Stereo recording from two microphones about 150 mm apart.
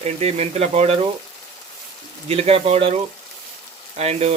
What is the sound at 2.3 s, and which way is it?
Speech, 40° right (ahead or behind).